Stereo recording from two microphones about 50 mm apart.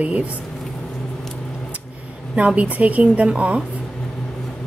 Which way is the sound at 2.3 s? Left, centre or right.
Right.